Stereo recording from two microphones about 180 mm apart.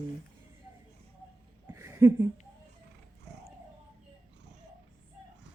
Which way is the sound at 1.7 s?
15° right (ahead or behind).